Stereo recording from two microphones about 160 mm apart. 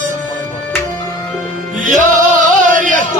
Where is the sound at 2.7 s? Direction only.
55° right (ahead or behind).